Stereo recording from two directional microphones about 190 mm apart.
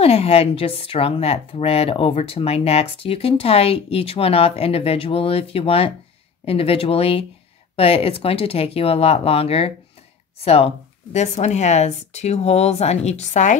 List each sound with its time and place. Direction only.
0.0 s speech: 30° left (ahead or behind)